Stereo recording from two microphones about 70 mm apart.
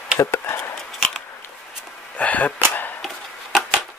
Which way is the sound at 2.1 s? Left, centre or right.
Left.